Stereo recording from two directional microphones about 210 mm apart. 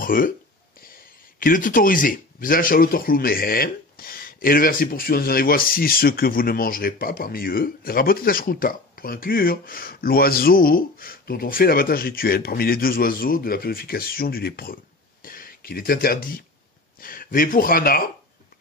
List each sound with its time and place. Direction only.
0.0 s speech: 40° left (ahead or behind)
1.4 s speech: 40° left (ahead or behind)
15.2 s a sound: 45° left (ahead or behind)
17.0 s speech: 45° left (ahead or behind)